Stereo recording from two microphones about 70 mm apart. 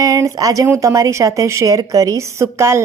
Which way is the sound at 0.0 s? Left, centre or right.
Right.